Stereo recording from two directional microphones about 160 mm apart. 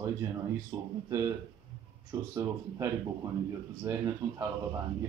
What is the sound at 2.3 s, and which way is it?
Speech, 20° right (ahead or behind).